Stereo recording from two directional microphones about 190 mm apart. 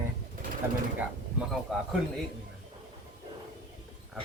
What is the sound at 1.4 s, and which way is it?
Speech, centre (ahead or behind).